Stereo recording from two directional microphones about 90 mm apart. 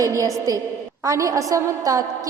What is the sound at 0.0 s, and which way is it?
A woman's voice, 35° right (ahead or behind).